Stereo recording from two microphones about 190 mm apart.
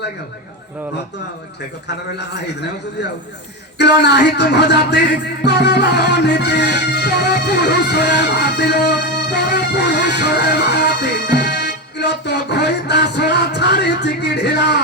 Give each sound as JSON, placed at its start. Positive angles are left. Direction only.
{"t": 2.1, "sound": "a man's voice", "side_deg": 65}
{"t": 5.5, "sound": "music", "side_deg": 60}